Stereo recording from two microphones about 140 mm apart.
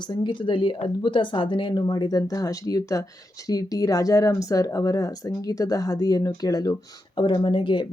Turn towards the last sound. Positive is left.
turn(degrees=35)  # may be behind; listen again after turning